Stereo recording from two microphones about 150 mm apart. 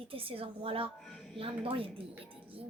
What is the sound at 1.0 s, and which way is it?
Speech, centre (ahead or behind).